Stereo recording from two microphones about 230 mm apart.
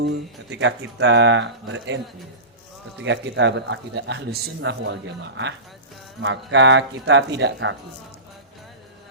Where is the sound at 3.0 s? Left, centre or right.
Right.